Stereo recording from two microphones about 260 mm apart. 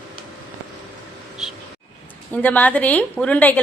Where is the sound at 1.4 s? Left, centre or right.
Centre.